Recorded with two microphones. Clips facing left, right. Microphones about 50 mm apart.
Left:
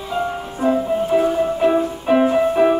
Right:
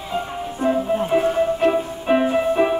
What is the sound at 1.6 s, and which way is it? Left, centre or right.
Music, centre.